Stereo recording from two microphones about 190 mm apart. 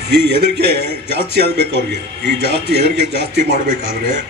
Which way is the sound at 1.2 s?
55° left (ahead or behind).